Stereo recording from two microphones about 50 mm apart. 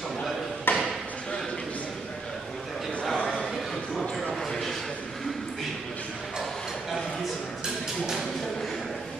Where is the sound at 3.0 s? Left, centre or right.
Centre.